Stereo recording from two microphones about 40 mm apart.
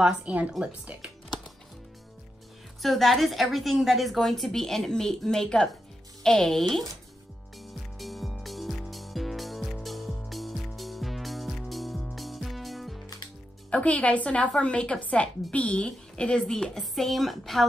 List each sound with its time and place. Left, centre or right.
0.0 s a woman's voice: right
0.3 s a woman's voice: right
2.8 s a woman's voice: centre
7.5 s music: centre
13.7 s a woman's voice: left; by 16.8 s centre
16.9 s a woman's voice: centre